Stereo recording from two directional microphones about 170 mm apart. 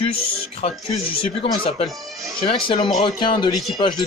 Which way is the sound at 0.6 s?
35° left (ahead or behind).